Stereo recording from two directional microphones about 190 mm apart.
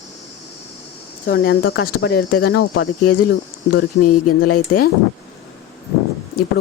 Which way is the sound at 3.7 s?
50° left (ahead or behind).